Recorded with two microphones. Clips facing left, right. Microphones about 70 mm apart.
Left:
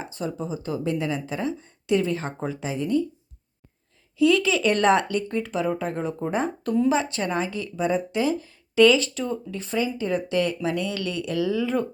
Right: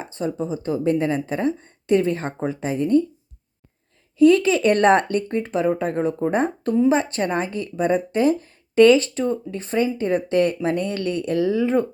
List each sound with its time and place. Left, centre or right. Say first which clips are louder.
0.0 s speech: right 4 dB; right
4.2 s speech: right 5 dB; right